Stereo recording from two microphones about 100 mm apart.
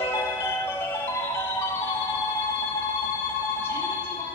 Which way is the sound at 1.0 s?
25° left (ahead or behind).